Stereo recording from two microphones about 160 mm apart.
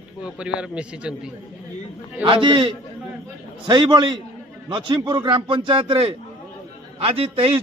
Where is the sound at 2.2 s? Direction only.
30° right (ahead or behind).